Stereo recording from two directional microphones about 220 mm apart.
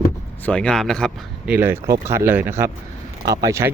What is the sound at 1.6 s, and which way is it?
Speech, 10° right (ahead or behind).